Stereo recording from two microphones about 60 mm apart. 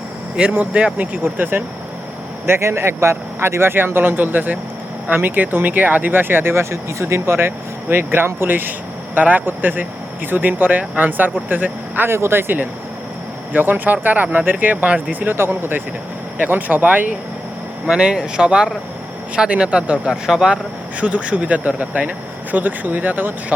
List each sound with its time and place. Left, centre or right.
0.5 s speech: right
1.2 s speech: right
2.5 s speech: right
12.1 s speech: right
17.8 s speech: centre
21.0 s speech: right